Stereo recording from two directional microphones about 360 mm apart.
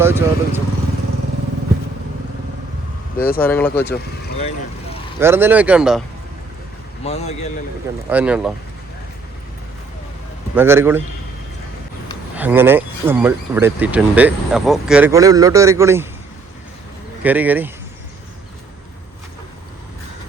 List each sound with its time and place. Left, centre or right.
0.0 s speech: centre
3.2 s speech: left
3.4 s speech: centre
5.2 s speech: centre
7.0 s a man's voice: centre
8.1 s speech: centre
10.5 s speech: centre
12.4 s speech: centre
17.2 s speech: centre